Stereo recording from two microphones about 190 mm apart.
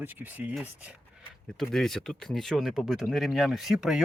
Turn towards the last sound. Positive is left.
turn(degrees=0)  # may be behind; listen again after turning